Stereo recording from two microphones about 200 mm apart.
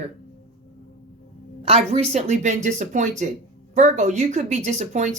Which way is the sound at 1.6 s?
35° right (ahead or behind).